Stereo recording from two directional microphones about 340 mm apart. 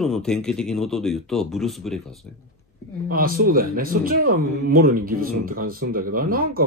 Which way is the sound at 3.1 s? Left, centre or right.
Right.